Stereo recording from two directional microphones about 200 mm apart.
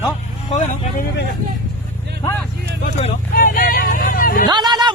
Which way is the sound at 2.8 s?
40° left (ahead or behind).